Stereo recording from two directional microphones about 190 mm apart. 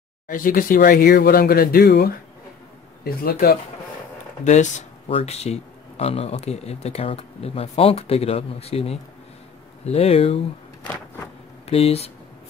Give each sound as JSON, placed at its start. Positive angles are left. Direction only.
{"t": 0.3, "sound": "speech", "side_deg": 45}
{"t": 4.5, "sound": "speech", "side_deg": 40}
{"t": 11.6, "sound": "speech", "side_deg": 30}